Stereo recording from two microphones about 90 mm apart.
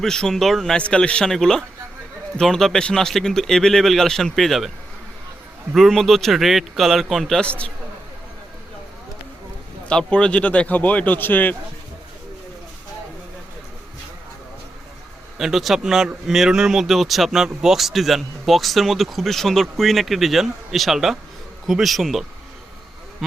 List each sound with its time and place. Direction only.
0.0 s a man's voice: 5° left (ahead or behind)
5.7 s speech: centre (ahead or behind)
9.9 s a man's voice: 10° left (ahead or behind)
15.4 s speech: 5° right (ahead or behind)